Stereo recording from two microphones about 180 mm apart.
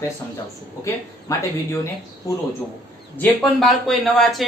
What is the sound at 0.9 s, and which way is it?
Speech, 20° left (ahead or behind).